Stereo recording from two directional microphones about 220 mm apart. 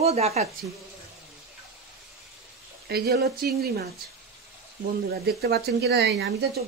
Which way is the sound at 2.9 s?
45° right (ahead or behind).